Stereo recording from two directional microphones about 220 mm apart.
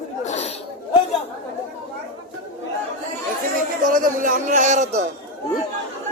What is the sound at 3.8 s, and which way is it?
Speech, 40° right (ahead or behind).